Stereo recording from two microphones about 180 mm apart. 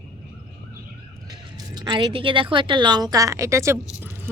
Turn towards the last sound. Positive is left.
turn(degrees=-15)  # may be behind; listen again after turning